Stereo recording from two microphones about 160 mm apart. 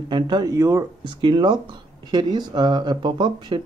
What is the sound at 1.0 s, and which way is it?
Speech, 30° right (ahead or behind).